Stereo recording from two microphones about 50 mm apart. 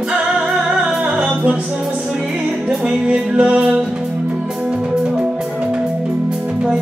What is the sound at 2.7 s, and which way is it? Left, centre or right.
Music, centre.